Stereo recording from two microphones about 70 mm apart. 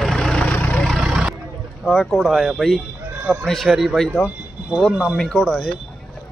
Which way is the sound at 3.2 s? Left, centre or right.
Right.